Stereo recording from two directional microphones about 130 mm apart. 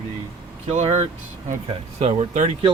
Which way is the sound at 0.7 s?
60° right (ahead or behind).